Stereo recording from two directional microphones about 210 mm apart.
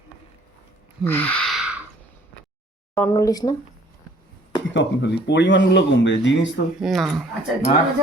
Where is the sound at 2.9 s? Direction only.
10° left (ahead or behind).